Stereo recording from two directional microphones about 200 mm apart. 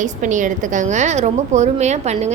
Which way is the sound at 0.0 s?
40° right (ahead or behind).